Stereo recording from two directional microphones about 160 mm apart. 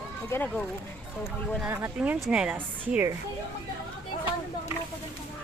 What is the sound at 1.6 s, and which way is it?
Speech, 10° right (ahead or behind).